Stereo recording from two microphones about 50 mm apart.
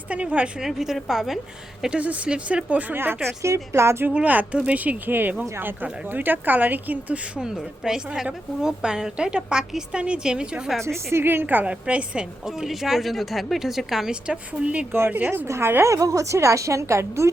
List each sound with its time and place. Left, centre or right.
0.1 s speech: right
0.6 s a woman's voice: centre
2.0 s speech: right
2.9 s speech: right
3.4 s a woman's voice: right
4.1 s speech: right
7.3 s a woman's voice: centre
11.1 s speech: right
11.4 s a woman's voice: right; by 14.1 s centre
14.1 s speech: right
14.9 s speech: right
15.2 s speech: right
15.4 s a woman's voice: right